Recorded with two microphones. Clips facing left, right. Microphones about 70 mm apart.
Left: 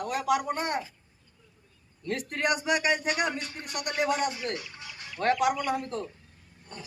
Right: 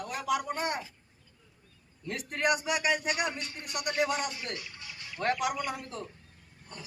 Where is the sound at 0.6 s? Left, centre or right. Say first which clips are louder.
Left 2 dB; left.